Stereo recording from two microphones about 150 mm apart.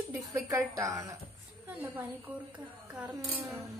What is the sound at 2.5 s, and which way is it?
Speech, 10° right (ahead or behind).